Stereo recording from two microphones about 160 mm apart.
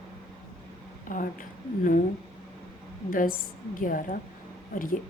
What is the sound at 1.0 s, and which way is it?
Speech, 60° left (ahead or behind).